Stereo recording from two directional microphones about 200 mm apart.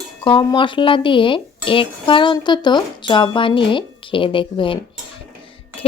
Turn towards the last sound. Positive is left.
turn(degrees=25)  # may be behind; listen again after turning